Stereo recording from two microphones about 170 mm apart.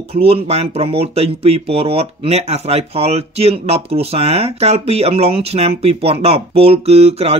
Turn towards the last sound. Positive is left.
turn(degrees=-35)  # may be behind; listen again after turning